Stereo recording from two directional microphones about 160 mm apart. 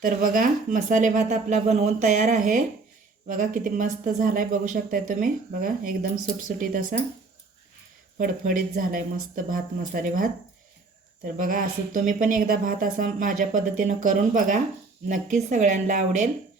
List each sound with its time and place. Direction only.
0.0 s speech: 60° right (ahead or behind)
8.2 s speech: 55° right (ahead or behind)
11.3 s speech: 60° right (ahead or behind)